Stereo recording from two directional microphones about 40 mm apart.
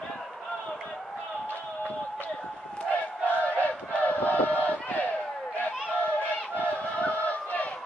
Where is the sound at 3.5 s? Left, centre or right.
Left.